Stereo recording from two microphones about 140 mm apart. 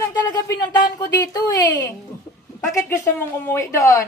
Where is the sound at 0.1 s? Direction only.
25° left (ahead or behind).